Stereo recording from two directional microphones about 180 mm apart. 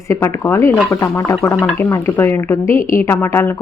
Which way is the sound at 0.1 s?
15° left (ahead or behind).